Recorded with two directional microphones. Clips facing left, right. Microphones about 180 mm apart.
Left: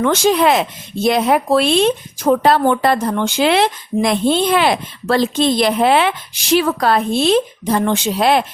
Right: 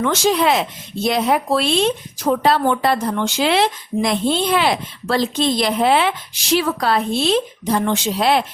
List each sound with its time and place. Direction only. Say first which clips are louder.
0.0 s speech: left 3 dB; 55° left (ahead or behind)